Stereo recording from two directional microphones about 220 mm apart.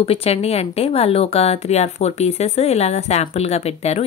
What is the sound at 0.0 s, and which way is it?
Speech, 25° left (ahead or behind).